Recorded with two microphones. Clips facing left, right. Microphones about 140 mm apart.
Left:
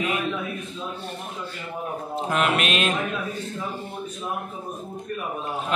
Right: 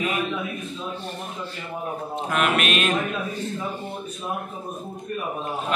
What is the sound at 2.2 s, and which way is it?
Mantra, 25° left (ahead or behind).